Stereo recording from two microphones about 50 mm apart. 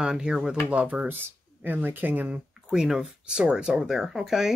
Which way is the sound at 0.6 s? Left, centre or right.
Right.